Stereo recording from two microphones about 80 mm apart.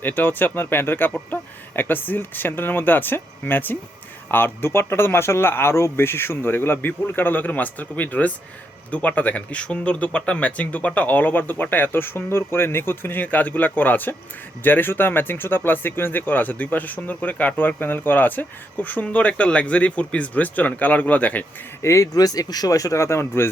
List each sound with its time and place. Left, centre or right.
0.0 s speech: left
21.8 s speech: left